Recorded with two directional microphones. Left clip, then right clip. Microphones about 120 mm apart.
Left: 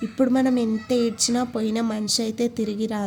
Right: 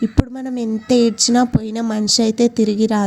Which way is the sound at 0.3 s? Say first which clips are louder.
Left 2 dB; 60° right (ahead or behind).